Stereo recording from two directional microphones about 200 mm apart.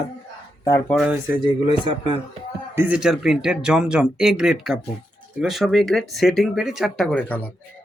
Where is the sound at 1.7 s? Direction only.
25° right (ahead or behind).